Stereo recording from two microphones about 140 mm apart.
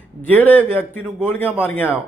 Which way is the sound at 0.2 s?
15° left (ahead or behind).